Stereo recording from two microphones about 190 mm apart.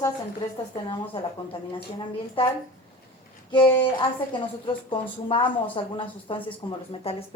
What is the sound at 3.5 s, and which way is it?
A woman's voice, 25° left (ahead or behind).